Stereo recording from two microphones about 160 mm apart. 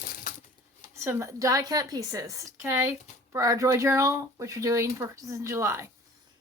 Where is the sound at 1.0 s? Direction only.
15° right (ahead or behind).